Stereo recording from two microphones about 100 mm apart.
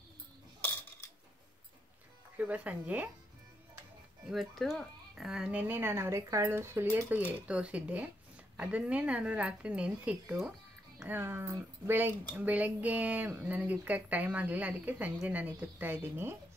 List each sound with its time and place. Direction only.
2.3 s speech: 15° right (ahead or behind)
4.3 s speech: centre (ahead or behind)
11.1 s speech: 25° right (ahead or behind)